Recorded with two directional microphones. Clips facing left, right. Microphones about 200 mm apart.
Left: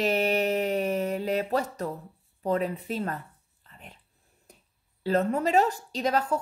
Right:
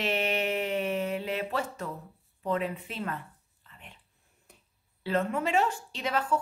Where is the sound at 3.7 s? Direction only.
40° left (ahead or behind).